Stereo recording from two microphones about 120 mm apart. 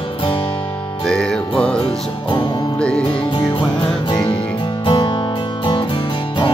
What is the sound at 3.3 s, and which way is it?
Music, 40° left (ahead or behind).